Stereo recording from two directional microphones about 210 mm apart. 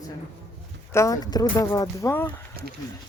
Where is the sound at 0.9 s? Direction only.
15° left (ahead or behind).